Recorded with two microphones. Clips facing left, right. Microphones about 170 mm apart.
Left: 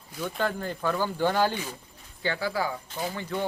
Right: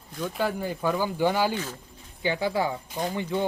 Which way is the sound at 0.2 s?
5° right (ahead or behind).